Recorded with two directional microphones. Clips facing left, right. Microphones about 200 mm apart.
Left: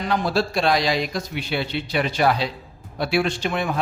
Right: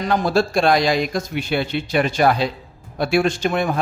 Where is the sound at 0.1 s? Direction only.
50° right (ahead or behind).